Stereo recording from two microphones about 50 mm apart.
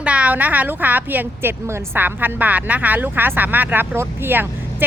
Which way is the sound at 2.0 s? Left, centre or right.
Right.